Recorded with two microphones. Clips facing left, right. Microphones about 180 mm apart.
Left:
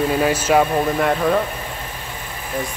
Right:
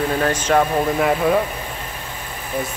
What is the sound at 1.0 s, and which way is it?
Speech, 5° right (ahead or behind).